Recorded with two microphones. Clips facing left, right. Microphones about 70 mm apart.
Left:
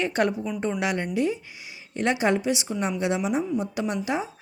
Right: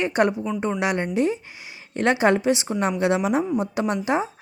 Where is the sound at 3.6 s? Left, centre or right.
Right.